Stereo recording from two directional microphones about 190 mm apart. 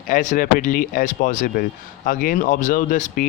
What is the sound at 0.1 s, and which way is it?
Speech, 45° left (ahead or behind).